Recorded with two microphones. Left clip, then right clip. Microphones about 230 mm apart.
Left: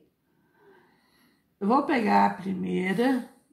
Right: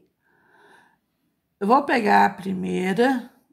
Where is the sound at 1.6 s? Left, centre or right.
Right.